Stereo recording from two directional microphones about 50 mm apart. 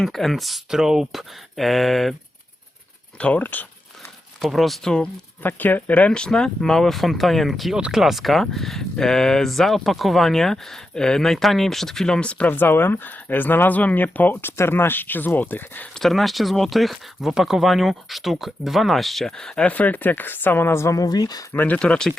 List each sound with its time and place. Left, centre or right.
0.0 s speech: centre
1.5 s speech: centre
3.2 s speech: left
3.4 s speech: left
4.4 s speech: centre
5.4 s speech: left; by 7.8 s centre
7.8 s speech: centre; by 12.5 s left
12.5 s speech: left
14.5 s speech: left
16.0 s speech: centre
19.4 s speech: centre
19.6 s speech: left
21.5 s speech: left
21.8 s speech: centre